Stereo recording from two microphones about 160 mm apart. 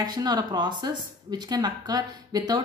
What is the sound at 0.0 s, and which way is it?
A woman's voice, 25° right (ahead or behind).